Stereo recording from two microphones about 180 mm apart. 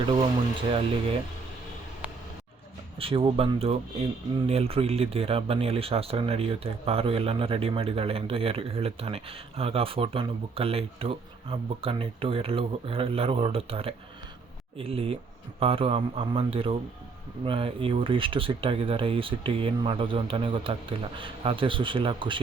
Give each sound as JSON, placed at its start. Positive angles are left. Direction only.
{"t": 0.7, "sound": "speech", "side_deg": -30}
{"t": 3.0, "sound": "speech", "side_deg": -30}